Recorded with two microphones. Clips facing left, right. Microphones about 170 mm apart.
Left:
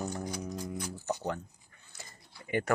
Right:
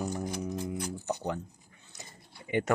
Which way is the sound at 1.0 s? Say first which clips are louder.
Even; 15° right (ahead or behind).